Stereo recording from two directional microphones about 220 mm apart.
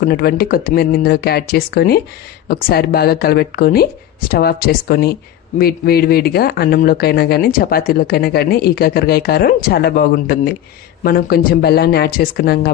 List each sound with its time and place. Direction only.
0.0 s speech: 45° left (ahead or behind)